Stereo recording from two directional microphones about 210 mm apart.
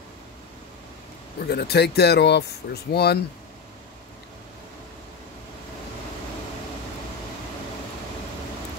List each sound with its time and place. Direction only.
1.5 s speech: 50° left (ahead or behind)